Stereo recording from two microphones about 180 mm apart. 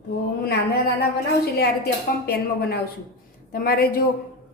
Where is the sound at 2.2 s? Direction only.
60° left (ahead or behind).